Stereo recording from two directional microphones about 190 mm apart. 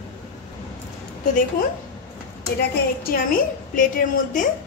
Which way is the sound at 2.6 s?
50° left (ahead or behind).